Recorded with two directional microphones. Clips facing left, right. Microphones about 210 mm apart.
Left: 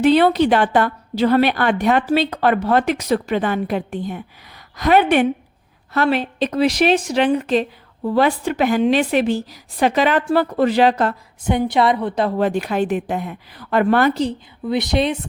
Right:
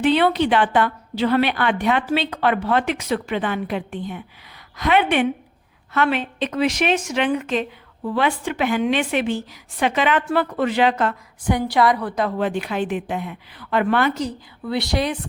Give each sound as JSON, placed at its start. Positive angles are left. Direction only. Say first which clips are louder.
{"t": 0.0, "sound": "a woman's voice", "louder": "left 4 dB", "side_deg": 40}
{"t": 11.4, "sound": "a woman's voice", "louder": "left 2 dB", "side_deg": 20}
{"t": 14.7, "sound": "speech", "louder": "left 4 dB", "side_deg": 20}